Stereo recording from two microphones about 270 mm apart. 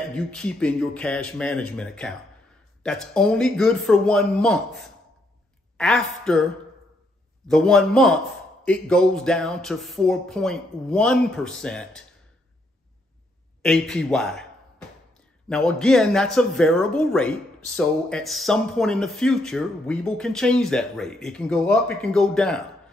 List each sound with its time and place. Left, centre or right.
0.1 s speech: centre
7.4 s speech: centre
13.6 s speech: centre